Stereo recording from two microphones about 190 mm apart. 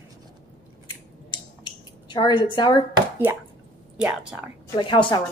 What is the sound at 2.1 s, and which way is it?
Speech, 25° left (ahead or behind).